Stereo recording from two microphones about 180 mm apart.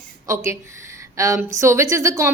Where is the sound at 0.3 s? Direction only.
15° right (ahead or behind).